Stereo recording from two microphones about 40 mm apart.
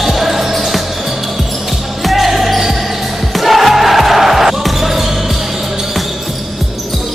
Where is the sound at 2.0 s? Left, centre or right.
Centre.